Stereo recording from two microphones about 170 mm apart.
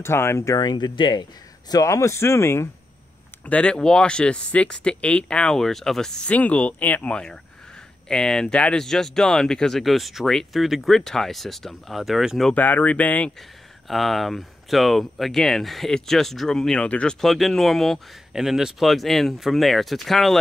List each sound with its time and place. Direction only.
0.0 s speech: 15° left (ahead or behind)